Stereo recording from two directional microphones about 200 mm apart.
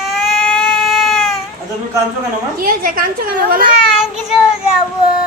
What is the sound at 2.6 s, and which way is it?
A woman's voice, 45° right (ahead or behind).